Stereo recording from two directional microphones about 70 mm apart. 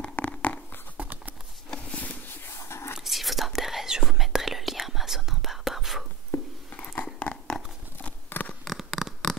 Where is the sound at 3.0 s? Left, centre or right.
Centre.